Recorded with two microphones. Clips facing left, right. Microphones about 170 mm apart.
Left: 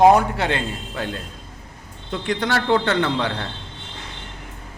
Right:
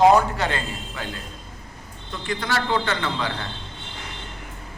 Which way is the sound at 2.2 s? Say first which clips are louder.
Left 4 dB; 70° left (ahead or behind).